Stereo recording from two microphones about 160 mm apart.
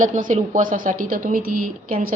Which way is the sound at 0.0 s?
55° right (ahead or behind).